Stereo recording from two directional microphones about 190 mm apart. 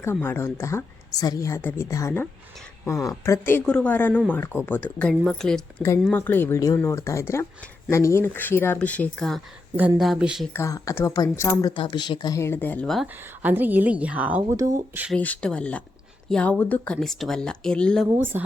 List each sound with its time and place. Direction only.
0.0 s a woman's voice: 10° left (ahead or behind)
9.7 s speech: 10° right (ahead or behind)
10.5 s a woman's voice: 15° left (ahead or behind); by 15.0 s 15° right (ahead or behind)
15.0 s speech: 5° left (ahead or behind)
18.1 s a woman's voice: 10° right (ahead or behind)